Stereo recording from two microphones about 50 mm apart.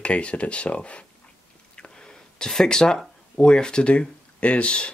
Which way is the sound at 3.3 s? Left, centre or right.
Centre.